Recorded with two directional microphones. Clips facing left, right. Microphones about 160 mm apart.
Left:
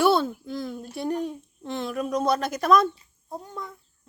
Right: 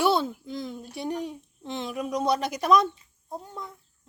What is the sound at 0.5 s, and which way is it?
A child's voice, 20° right (ahead or behind).